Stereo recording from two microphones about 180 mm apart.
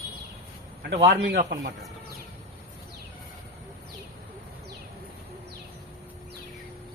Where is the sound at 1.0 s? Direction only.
75° right (ahead or behind).